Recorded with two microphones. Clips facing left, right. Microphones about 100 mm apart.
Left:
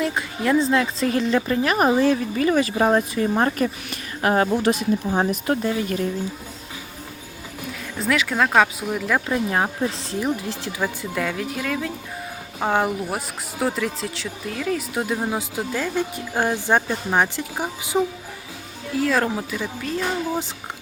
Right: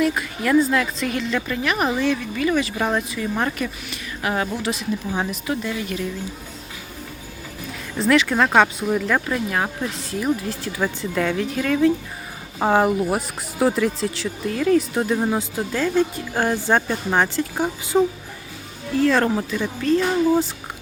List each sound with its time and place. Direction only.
0.0 s speech: 25° left (ahead or behind)
7.9 s speech: centre (ahead or behind)
9.3 s speech: 25° left (ahead or behind)
10.8 s speech: 5° left (ahead or behind)